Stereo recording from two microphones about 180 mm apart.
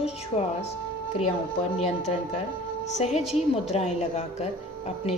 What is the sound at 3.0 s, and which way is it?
A woman's voice, 35° left (ahead or behind).